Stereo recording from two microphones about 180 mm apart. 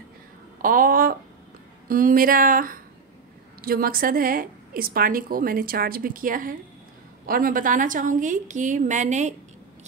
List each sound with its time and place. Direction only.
0.6 s a woman's voice: 50° right (ahead or behind)